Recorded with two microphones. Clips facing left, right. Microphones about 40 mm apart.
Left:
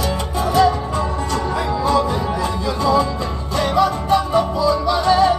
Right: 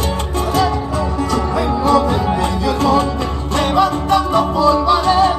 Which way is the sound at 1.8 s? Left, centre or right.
Right.